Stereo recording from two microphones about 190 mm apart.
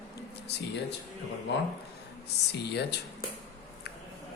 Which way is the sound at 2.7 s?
60° left (ahead or behind).